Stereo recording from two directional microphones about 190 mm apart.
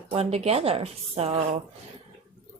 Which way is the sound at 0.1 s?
30° right (ahead or behind).